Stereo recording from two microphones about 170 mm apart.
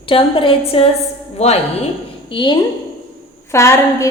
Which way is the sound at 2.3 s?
25° left (ahead or behind).